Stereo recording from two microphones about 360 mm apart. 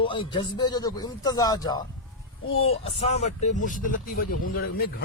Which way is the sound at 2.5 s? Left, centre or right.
Left.